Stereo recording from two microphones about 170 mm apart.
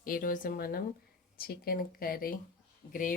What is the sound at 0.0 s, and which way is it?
Speech, 55° left (ahead or behind).